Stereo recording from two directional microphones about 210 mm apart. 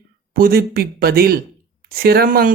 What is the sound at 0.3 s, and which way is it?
Speech, 45° right (ahead or behind).